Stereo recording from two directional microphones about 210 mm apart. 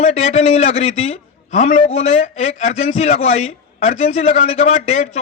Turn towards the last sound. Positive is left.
turn(degrees=30)  # may be behind; listen again after turning